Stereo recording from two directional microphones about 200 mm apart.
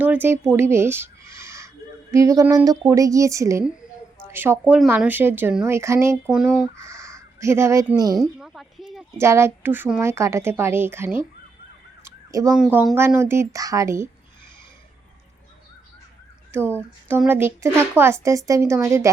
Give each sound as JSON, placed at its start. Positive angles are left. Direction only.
{"t": 0.0, "sound": "a woman's voice", "side_deg": -10}
{"t": 6.3, "sound": "speech", "side_deg": 0}
{"t": 6.8, "sound": "speech", "side_deg": -15}
{"t": 8.2, "sound": "speech", "side_deg": 0}
{"t": 9.1, "sound": "speech", "side_deg": -15}
{"t": 12.0, "sound": "a sound", "side_deg": -15}
{"t": 12.5, "sound": "speech", "side_deg": -5}
{"t": 17.1, "sound": "speech", "side_deg": -10}